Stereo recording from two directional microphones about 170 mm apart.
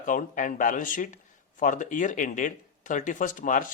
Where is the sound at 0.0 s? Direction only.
50° left (ahead or behind).